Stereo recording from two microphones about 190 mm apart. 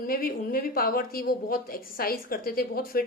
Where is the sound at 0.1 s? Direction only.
50° left (ahead or behind).